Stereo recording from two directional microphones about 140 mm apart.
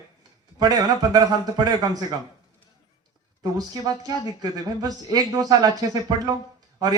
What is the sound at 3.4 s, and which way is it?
A man's voice, 25° right (ahead or behind).